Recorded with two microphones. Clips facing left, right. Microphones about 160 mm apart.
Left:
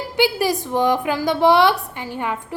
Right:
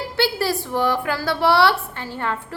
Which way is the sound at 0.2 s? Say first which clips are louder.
Left 3 dB; 15° left (ahead or behind).